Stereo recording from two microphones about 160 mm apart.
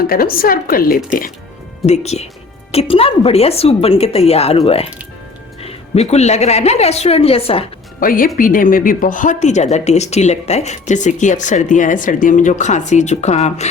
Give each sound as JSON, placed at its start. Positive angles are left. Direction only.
{"t": 0.1, "sound": "a woman's voice", "side_deg": 65}
{"t": 1.9, "sound": "a woman's voice", "side_deg": 45}
{"t": 8.0, "sound": "a woman's voice", "side_deg": 60}